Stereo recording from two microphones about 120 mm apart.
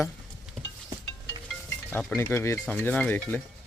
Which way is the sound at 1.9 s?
20° left (ahead or behind).